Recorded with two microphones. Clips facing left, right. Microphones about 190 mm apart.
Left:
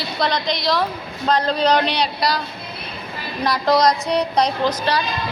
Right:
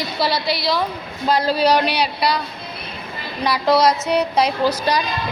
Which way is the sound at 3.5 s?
5° right (ahead or behind).